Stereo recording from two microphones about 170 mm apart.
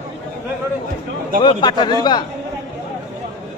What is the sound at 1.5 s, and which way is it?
Speech, 25° left (ahead or behind).